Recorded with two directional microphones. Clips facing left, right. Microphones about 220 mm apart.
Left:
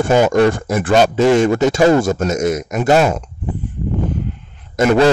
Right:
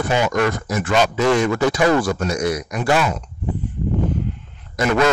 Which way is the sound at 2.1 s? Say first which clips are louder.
Left 4 dB; 45° left (ahead or behind).